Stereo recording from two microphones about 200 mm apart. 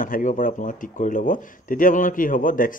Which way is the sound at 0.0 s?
40° left (ahead or behind).